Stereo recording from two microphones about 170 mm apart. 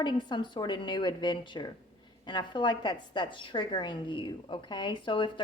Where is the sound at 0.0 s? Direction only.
25° left (ahead or behind).